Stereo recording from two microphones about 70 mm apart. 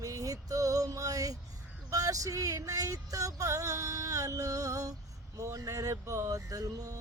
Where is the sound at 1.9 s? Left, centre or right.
Right.